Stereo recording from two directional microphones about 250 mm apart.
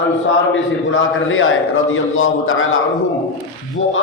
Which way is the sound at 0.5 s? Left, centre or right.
Left.